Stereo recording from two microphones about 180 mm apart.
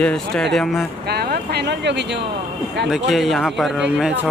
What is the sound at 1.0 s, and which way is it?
Speech, 65° right (ahead or behind).